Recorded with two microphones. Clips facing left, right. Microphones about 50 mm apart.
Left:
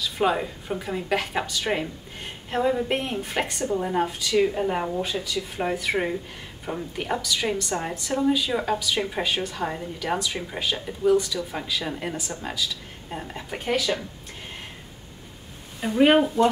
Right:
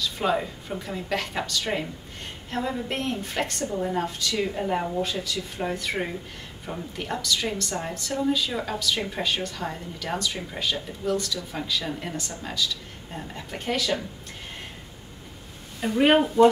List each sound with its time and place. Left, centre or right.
0.0 s a woman's voice: centre
15.8 s speech: centre